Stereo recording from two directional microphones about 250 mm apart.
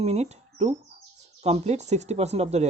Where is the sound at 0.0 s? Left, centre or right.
Right.